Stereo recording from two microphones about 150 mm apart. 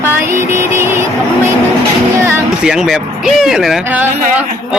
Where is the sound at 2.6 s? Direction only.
5° right (ahead or behind).